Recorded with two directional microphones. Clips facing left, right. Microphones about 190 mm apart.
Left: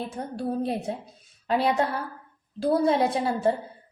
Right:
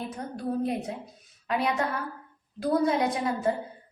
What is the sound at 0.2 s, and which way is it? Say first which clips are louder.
A woman's voice: left 1 dB; 30° left (ahead or behind).